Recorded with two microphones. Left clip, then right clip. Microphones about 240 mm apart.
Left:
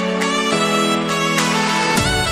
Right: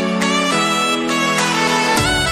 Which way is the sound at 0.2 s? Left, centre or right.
Centre.